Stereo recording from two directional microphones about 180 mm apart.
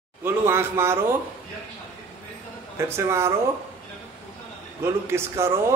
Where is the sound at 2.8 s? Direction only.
15° right (ahead or behind).